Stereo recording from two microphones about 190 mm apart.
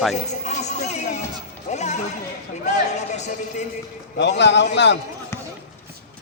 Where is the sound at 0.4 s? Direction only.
35° left (ahead or behind).